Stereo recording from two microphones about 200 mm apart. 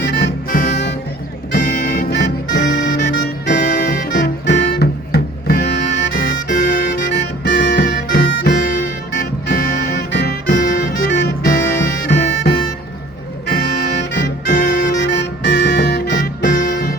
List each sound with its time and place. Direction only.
0.0 s music: 50° left (ahead or behind)
13.5 s music: 50° left (ahead or behind)